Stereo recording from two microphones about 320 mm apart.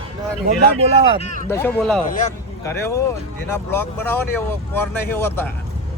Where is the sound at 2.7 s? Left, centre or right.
Centre.